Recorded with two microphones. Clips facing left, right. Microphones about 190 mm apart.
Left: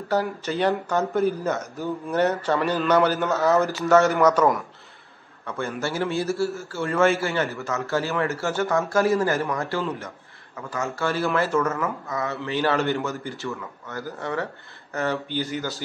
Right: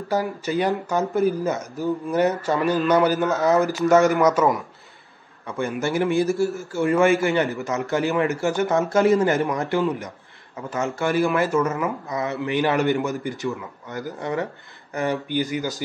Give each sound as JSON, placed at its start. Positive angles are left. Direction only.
{"t": 0.1, "sound": "a man's voice", "side_deg": -10}
{"t": 2.0, "sound": "a man's voice", "side_deg": -5}
{"t": 3.3, "sound": "a man's voice", "side_deg": -15}
{"t": 5.5, "sound": "a man's voice", "side_deg": -15}